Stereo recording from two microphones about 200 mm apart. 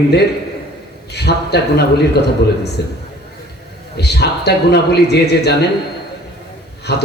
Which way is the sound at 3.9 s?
55° left (ahead or behind).